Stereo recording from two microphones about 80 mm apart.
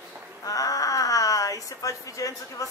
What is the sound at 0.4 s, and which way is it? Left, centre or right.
A woman's voice, left.